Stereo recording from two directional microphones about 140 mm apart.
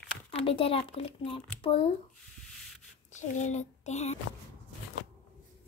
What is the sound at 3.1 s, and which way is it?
A child's voice, 60° left (ahead or behind).